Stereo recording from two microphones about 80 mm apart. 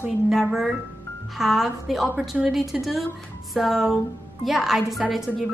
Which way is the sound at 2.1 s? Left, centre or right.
Centre.